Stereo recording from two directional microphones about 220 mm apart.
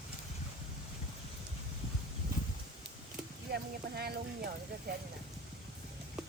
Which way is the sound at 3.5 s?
45° right (ahead or behind).